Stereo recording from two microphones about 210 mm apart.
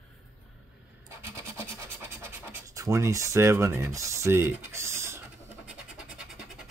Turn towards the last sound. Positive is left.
turn(degrees=-10)  # may be behind; listen again after turning